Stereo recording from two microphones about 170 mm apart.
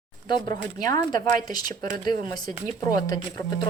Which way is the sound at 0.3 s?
25° left (ahead or behind).